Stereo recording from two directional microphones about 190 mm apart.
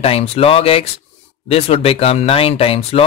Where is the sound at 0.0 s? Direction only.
30° left (ahead or behind).